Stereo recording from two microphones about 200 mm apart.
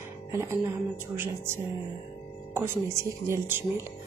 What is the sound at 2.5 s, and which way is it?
Speech, 10° right (ahead or behind).